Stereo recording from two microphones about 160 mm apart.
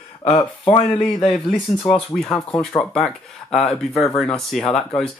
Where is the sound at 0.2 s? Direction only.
35° left (ahead or behind).